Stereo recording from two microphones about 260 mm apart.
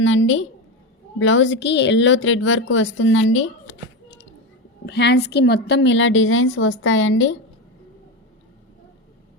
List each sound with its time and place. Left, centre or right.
0.0 s a woman's voice: left
4.9 s a woman's voice: left